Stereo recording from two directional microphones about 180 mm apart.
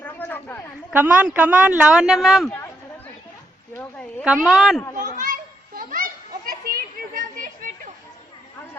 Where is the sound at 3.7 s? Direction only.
5° left (ahead or behind).